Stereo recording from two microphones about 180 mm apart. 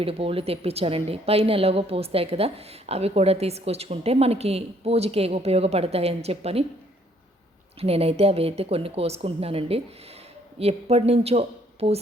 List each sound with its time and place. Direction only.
0.0 s a woman's voice: 30° right (ahead or behind)
7.8 s a woman's voice: 35° right (ahead or behind)